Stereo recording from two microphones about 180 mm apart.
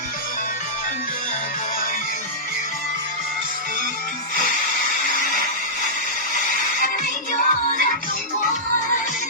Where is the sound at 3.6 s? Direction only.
50° left (ahead or behind).